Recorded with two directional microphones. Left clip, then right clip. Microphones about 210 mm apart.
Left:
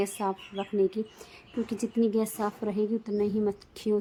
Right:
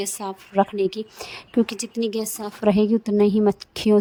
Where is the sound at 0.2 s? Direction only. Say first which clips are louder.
Even; 5° left (ahead or behind).